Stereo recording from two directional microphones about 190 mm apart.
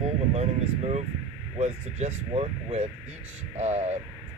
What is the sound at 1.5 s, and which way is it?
Speech, 35° right (ahead or behind).